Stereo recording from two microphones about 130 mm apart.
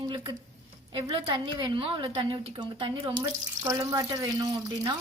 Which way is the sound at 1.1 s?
40° right (ahead or behind).